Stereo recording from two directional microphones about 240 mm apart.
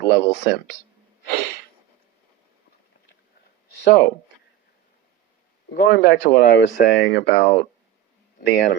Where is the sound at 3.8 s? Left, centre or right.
Left.